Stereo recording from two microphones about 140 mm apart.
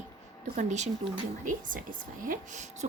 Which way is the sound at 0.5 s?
60° right (ahead or behind).